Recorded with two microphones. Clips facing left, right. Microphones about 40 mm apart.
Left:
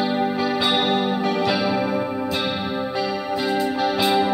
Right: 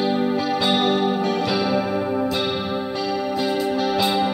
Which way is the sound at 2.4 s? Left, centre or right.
Centre.